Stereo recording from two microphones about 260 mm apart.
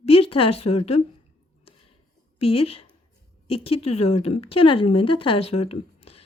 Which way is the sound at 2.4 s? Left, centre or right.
Left.